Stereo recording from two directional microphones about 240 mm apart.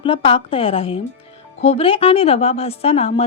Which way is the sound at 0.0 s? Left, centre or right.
Left.